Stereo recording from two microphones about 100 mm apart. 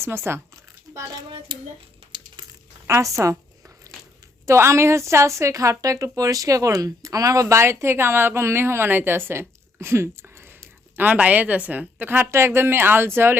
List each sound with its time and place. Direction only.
0.0 s a woman's voice: 25° right (ahead or behind)
1.5 s a child's voice: 50° right (ahead or behind)
2.8 s speech: 30° right (ahead or behind)
4.4 s a woman's voice: 30° right (ahead or behind)